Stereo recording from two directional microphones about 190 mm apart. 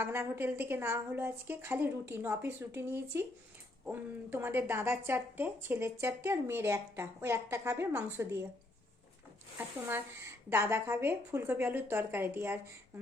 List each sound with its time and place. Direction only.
0.0 s speech: 15° right (ahead or behind)
9.6 s speech: 10° right (ahead or behind)